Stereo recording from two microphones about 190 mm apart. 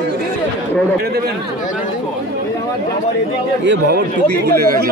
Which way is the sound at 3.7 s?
60° right (ahead or behind).